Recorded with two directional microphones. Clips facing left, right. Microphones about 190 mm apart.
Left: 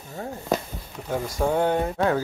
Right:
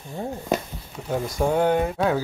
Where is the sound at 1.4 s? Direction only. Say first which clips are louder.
Right 2 dB; 15° right (ahead or behind).